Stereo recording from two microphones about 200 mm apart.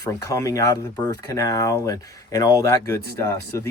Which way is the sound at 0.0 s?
15° left (ahead or behind).